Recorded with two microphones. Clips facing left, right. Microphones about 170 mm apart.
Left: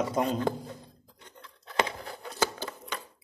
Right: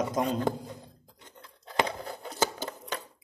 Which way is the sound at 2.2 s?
25° right (ahead or behind).